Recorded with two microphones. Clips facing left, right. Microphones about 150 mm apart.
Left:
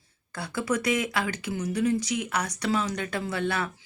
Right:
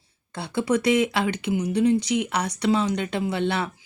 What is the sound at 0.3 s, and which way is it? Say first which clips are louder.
Speech: right 5 dB; 25° right (ahead or behind).